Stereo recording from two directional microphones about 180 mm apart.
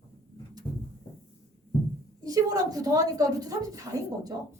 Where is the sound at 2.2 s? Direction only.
20° right (ahead or behind).